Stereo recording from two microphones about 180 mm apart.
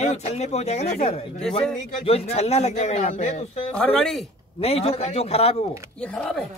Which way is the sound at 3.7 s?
5° left (ahead or behind).